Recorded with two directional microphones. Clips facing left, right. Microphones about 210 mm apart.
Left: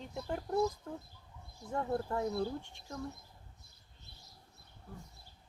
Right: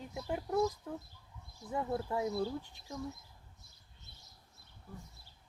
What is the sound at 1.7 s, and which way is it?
Speech, 5° right (ahead or behind).